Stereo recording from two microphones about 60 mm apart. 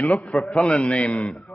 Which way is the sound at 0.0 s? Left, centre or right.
Left.